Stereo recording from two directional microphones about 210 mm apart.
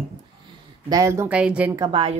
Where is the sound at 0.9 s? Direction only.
15° right (ahead or behind).